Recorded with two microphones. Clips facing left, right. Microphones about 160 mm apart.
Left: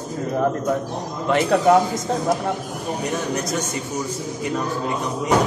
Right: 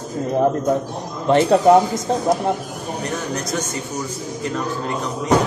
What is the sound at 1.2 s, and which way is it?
Speech, 30° right (ahead or behind).